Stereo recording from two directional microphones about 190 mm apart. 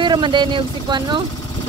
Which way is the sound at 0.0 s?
25° right (ahead or behind).